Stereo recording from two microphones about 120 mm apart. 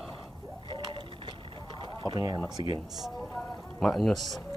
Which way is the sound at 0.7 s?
40° right (ahead or behind).